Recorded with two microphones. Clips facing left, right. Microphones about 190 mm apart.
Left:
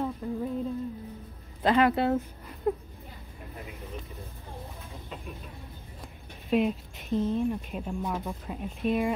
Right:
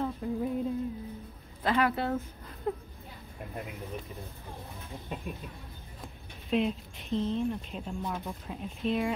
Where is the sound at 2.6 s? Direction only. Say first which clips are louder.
Left 5 dB; 5° left (ahead or behind).